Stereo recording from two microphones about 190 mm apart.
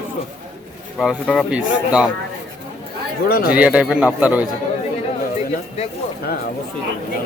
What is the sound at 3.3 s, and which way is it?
Speech, 50° left (ahead or behind).